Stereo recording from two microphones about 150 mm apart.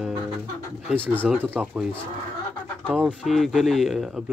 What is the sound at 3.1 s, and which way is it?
Speech, centre (ahead or behind).